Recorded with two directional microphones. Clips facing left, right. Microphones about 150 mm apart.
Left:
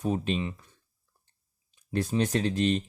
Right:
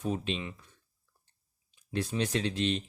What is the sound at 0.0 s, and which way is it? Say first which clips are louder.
Speech: left 4 dB; 40° left (ahead or behind).